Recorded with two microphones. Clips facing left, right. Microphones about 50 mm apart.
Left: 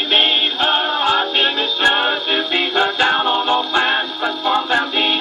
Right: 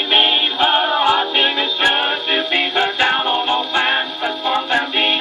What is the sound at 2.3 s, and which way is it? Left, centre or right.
Music, centre.